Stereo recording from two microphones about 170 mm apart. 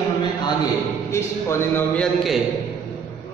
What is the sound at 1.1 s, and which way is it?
Speech, 15° left (ahead or behind).